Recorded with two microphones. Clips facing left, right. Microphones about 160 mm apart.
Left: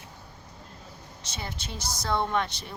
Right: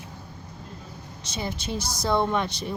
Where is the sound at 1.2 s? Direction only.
15° right (ahead or behind).